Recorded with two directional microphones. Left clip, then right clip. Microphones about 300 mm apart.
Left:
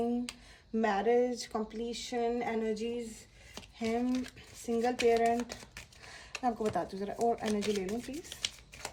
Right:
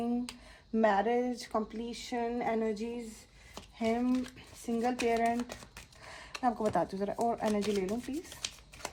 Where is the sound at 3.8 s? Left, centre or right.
Right.